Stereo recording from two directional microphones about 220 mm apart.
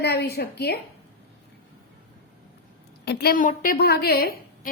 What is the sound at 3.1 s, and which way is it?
A woman's voice, 45° left (ahead or behind).